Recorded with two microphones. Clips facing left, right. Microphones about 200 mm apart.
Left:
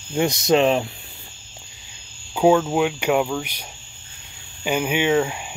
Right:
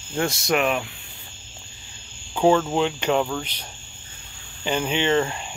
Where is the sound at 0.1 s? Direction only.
15° left (ahead or behind).